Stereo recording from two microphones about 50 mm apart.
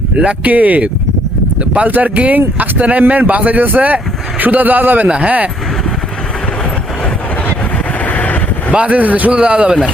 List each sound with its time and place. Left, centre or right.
0.2 s a man's voice: right
5.0 s a man's voice: right
8.0 s vehicle: left
8.7 s a man's voice: right